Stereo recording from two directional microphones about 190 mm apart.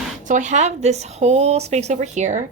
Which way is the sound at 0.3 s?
40° right (ahead or behind).